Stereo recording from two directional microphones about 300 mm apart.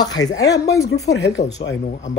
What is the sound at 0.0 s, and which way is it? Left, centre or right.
Speech, centre.